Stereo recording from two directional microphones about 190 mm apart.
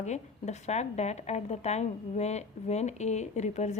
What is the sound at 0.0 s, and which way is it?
A woman's voice, 35° left (ahead or behind).